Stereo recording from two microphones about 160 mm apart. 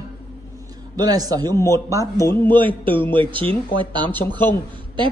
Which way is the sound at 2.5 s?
30° right (ahead or behind).